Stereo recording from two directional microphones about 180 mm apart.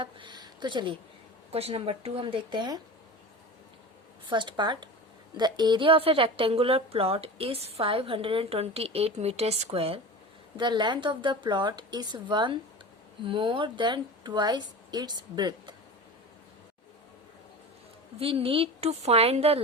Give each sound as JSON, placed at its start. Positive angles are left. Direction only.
{"t": 0.0, "sound": "a sound", "side_deg": -25}
{"t": 1.5, "sound": "a woman's voice", "side_deg": -35}
{"t": 4.3, "sound": "a woman's voice", "side_deg": -25}
{"t": 18.2, "sound": "a woman's voice", "side_deg": -30}